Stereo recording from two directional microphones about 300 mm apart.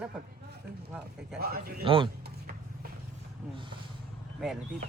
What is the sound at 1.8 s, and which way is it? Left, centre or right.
Speech, centre.